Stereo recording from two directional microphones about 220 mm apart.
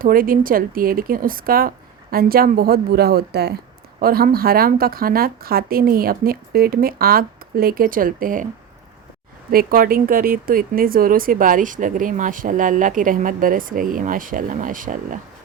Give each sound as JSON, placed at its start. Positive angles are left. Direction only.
{"t": 0.0, "sound": "speech", "side_deg": -40}
{"t": 9.5, "sound": "speech", "side_deg": -40}